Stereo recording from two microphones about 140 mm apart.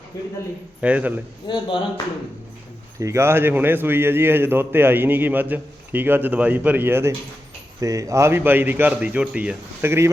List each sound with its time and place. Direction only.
0.1 s a man's voice: 25° left (ahead or behind)
0.8 s a man's voice: 10° right (ahead or behind)
1.5 s speech: 35° left (ahead or behind)
3.0 s a man's voice: 20° right (ahead or behind)